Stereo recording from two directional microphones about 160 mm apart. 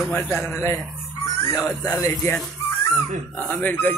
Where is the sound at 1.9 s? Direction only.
20° left (ahead or behind).